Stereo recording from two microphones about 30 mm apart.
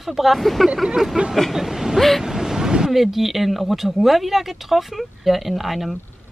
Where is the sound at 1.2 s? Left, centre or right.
Right.